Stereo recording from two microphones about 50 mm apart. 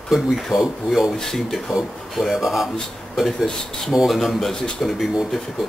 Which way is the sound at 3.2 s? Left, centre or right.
Centre.